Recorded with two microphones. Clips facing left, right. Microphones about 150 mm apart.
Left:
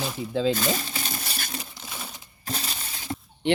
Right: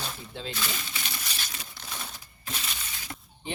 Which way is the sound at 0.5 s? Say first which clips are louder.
Left 9 dB; 40° left (ahead or behind).